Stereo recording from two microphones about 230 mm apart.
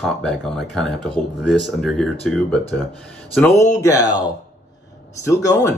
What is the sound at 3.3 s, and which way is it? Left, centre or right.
Speech, centre.